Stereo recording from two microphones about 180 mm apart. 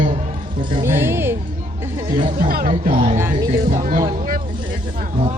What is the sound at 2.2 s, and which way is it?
Speech, 55° right (ahead or behind).